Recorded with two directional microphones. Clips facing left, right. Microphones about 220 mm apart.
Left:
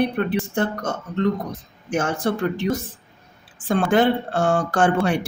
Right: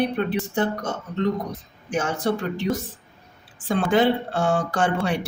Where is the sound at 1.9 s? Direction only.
50° left (ahead or behind).